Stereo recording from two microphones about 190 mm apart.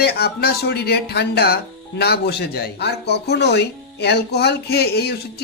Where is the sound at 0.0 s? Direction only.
55° left (ahead or behind).